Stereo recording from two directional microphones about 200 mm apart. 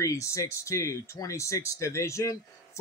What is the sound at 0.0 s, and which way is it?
Speech, 15° left (ahead or behind).